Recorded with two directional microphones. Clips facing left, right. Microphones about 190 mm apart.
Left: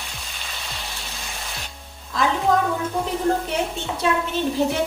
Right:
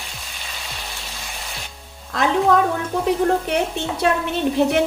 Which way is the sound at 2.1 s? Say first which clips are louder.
Right 1 dB; 65° right (ahead or behind).